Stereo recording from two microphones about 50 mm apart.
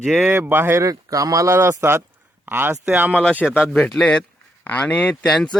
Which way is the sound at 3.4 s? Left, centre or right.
Centre.